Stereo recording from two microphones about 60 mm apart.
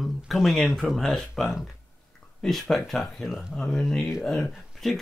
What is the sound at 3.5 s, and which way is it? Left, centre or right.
Speech, centre.